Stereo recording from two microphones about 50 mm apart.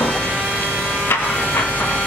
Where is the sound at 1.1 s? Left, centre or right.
Left.